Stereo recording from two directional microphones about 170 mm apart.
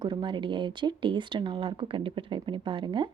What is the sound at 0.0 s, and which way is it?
A woman's voice, 25° right (ahead or behind).